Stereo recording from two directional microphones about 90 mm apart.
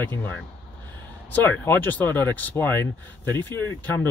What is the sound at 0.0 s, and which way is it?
Speech, 20° left (ahead or behind).